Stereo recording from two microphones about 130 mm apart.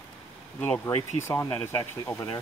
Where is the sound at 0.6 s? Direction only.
15° left (ahead or behind).